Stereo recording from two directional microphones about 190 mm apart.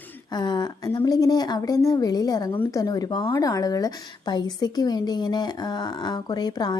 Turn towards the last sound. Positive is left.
turn(degrees=20)  # may be behind; listen again after turning